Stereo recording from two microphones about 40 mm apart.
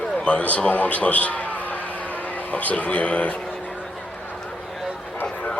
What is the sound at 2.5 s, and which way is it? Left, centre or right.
Speech, left.